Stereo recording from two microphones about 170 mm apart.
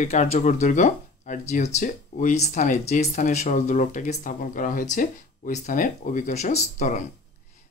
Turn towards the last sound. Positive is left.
turn(degrees=45)  # may be behind; listen again after turning